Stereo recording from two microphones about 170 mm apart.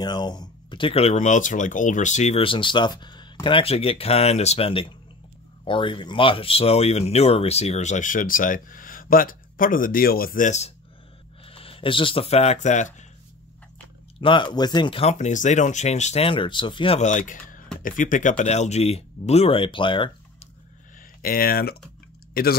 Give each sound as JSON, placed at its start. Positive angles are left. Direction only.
{"t": 0.0, "sound": "speech", "side_deg": 25}
{"t": 11.4, "sound": "speech", "side_deg": 35}
{"t": 14.2, "sound": "speech", "side_deg": 30}
{"t": 17.0, "sound": "speech", "side_deg": 50}
{"t": 21.2, "sound": "speech", "side_deg": 60}